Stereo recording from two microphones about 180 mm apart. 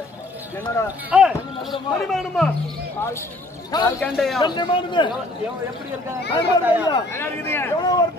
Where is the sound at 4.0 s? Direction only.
Centre (ahead or behind).